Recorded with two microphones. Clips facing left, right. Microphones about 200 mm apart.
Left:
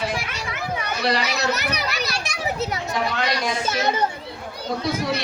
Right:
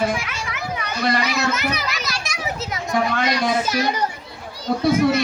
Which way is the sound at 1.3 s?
35° left (ahead or behind).